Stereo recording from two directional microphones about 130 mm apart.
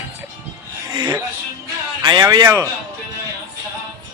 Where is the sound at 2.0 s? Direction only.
35° right (ahead or behind).